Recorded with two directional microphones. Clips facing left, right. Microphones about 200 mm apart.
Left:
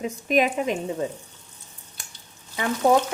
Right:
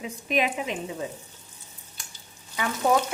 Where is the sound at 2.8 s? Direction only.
30° left (ahead or behind).